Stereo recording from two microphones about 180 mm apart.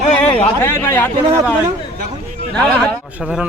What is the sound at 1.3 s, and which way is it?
Speech, 15° right (ahead or behind).